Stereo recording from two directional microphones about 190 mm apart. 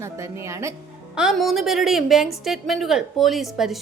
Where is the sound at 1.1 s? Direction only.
Centre (ahead or behind).